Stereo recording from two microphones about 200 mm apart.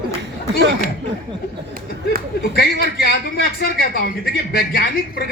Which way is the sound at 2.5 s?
50° left (ahead or behind).